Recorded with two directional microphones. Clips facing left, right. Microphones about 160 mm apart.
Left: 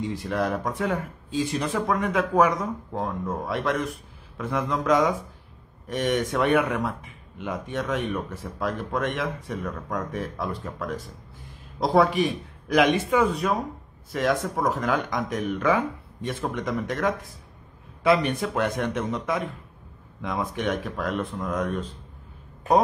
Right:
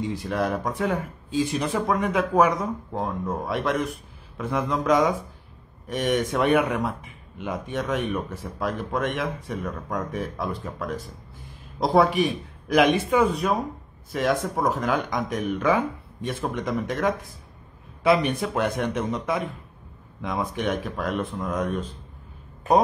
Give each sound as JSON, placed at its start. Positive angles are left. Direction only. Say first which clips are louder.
{"t": 0.3, "sound": "speech", "louder": "even", "side_deg": -5}